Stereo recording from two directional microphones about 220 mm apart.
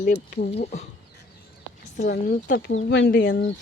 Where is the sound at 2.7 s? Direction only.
55° left (ahead or behind).